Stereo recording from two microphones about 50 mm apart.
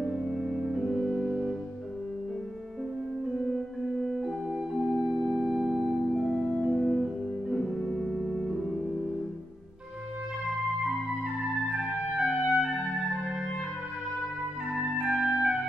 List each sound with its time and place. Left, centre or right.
0.0 s music: centre
3.4 s organ: centre
4.9 s organ: centre
5.8 s organ: centre
6.8 s music: centre
12.2 s clarinet: centre
15.0 s music: centre